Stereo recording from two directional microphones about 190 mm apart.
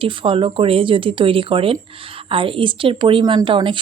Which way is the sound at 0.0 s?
25° right (ahead or behind).